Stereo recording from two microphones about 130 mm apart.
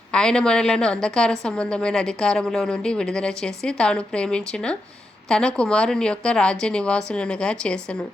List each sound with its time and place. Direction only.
0.1 s a woman's voice: 5° left (ahead or behind)